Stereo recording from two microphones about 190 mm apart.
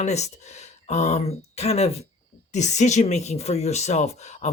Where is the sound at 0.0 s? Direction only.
35° left (ahead or behind).